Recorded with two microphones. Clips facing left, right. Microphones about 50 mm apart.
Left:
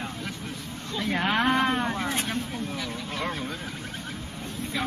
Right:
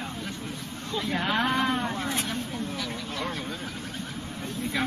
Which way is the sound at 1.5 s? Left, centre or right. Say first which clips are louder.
Left 2 dB; left.